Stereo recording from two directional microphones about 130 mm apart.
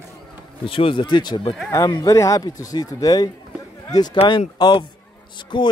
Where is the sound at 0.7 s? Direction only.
45° left (ahead or behind).